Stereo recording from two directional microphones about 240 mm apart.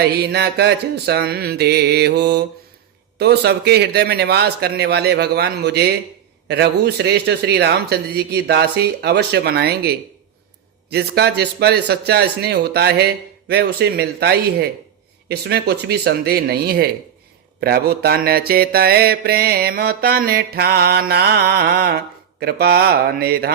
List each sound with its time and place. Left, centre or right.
0.0 s a man's voice: right
15.3 s mantra: right